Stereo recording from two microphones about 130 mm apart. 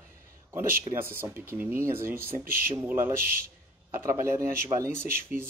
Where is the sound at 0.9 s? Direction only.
15° right (ahead or behind).